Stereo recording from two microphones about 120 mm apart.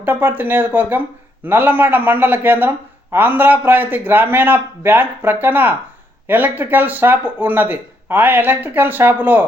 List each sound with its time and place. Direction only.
0.0 s speech: 15° right (ahead or behind)